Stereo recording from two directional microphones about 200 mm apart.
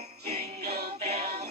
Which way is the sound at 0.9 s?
35° right (ahead or behind).